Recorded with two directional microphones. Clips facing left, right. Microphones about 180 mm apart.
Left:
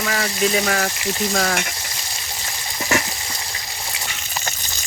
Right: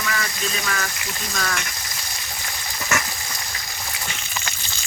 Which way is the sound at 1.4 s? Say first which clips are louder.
Left 3 dB; 50° left (ahead or behind).